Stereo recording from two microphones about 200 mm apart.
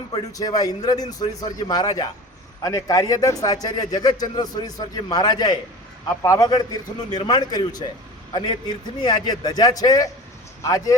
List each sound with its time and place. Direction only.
0.1 s a man's voice: 20° left (ahead or behind)